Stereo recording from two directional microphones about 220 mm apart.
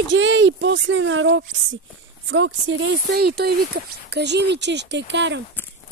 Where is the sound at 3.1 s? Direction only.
45° right (ahead or behind).